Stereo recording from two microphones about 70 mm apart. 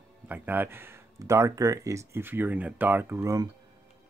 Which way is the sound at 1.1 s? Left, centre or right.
Right.